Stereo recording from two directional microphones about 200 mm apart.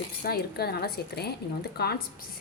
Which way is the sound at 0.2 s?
50° left (ahead or behind).